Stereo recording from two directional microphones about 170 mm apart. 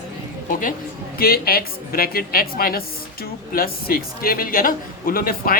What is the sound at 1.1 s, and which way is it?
A man's voice, 60° left (ahead or behind).